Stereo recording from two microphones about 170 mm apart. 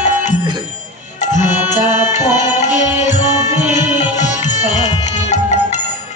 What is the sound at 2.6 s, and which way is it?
Music, 45° left (ahead or behind).